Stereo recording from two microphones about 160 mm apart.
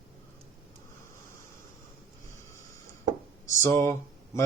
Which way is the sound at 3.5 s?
15° left (ahead or behind).